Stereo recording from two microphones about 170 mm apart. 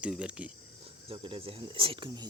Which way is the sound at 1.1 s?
30° right (ahead or behind).